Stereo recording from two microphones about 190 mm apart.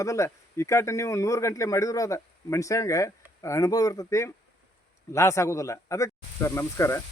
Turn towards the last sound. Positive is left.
turn(degrees=15)  # may be behind; listen again after turning